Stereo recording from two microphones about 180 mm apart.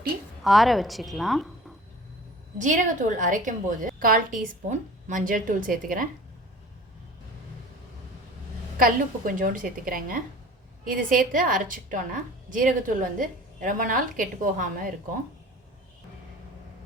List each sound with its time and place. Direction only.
0.4 s a woman's voice: centre (ahead or behind)
2.6 s a woman's voice: 45° right (ahead or behind)
8.8 s a woman's voice: 50° right (ahead or behind)